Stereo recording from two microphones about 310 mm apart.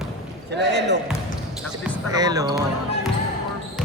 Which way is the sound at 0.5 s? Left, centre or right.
Right.